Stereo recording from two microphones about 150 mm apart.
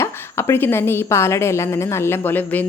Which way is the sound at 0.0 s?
20° left (ahead or behind).